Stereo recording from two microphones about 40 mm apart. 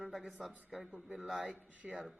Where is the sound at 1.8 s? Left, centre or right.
Centre.